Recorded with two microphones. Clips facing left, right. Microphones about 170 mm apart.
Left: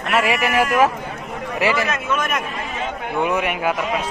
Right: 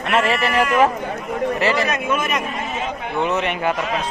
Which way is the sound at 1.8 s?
20° right (ahead or behind).